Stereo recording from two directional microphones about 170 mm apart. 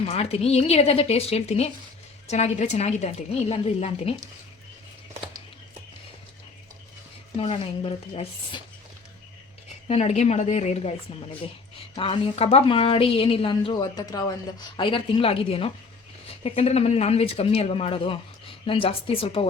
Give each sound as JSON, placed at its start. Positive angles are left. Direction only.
{"t": 0.0, "sound": "a woman's voice", "side_deg": 35}
{"t": 7.3, "sound": "a woman's voice", "side_deg": 35}
{"t": 9.8, "sound": "speech", "side_deg": 40}
{"t": 11.9, "sound": "a woman's voice", "side_deg": 30}